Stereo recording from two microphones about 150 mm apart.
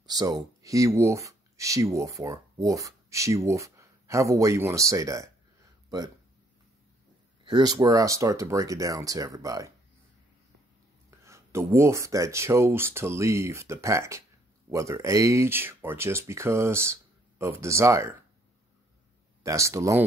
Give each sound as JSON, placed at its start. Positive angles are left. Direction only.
{"t": 0.0, "sound": "speech", "side_deg": -25}
{"t": 7.4, "sound": "speech", "side_deg": -30}
{"t": 11.1, "sound": "speech", "side_deg": -20}
{"t": 19.4, "sound": "speech", "side_deg": -20}